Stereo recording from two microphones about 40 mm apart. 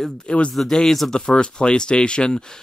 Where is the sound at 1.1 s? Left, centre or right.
Left.